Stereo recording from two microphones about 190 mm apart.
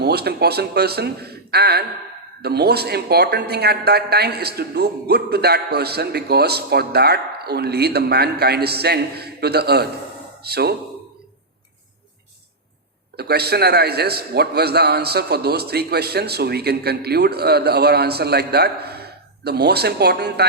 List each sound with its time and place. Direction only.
0.0 s a woman's voice: 55° right (ahead or behind)
13.1 s a woman's voice: 55° right (ahead or behind)